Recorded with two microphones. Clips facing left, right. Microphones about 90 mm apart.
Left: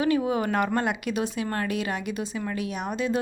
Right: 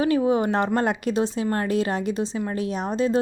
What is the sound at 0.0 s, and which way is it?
A woman's voice, 30° right (ahead or behind).